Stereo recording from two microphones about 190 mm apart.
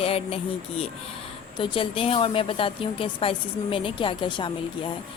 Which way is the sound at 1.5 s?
25° left (ahead or behind).